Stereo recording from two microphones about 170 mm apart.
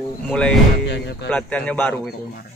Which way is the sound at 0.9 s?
85° left.